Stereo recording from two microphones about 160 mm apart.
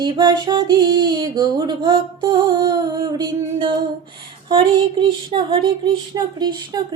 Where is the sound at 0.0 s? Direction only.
30° right (ahead or behind).